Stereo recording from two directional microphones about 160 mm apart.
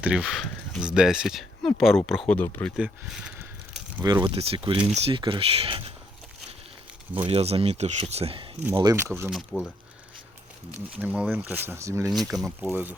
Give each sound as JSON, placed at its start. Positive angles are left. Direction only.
{"t": 0.0, "sound": "speech", "side_deg": -5}
{"t": 2.7, "sound": "a sound", "side_deg": -5}
{"t": 4.0, "sound": "speech", "side_deg": -25}
{"t": 4.4, "sound": "speech", "side_deg": -35}
{"t": 7.3, "sound": "speech", "side_deg": -40}
{"t": 8.7, "sound": "speech", "side_deg": -20}
{"t": 9.3, "sound": "speech", "side_deg": 0}
{"t": 11.0, "sound": "speech", "side_deg": -10}
{"t": 12.3, "sound": "speech", "side_deg": 0}
{"t": 12.7, "sound": "speech", "side_deg": -10}